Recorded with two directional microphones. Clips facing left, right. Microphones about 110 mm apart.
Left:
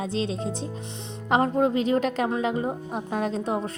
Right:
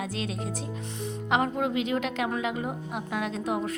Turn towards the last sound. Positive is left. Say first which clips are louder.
# left 3 dB
turn(degrees=30)  # may be behind; listen again after turning